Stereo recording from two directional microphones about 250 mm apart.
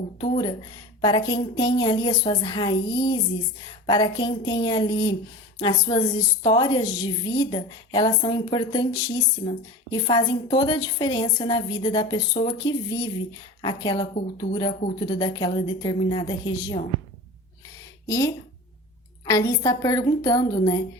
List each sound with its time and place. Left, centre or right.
0.2 s a woman's voice: centre
18.1 s a woman's voice: centre